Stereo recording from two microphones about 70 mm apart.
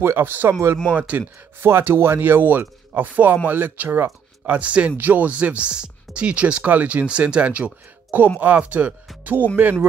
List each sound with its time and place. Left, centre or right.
0.0 s speech: right
1.6 s speech: right
4.6 s speech: centre